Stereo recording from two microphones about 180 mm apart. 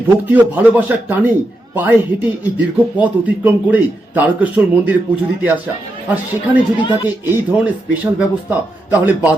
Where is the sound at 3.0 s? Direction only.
10° right (ahead or behind).